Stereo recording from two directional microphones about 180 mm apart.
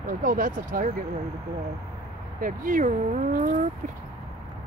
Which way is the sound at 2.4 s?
50° right (ahead or behind).